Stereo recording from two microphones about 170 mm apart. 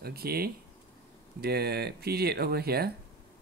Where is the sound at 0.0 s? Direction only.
65° right (ahead or behind).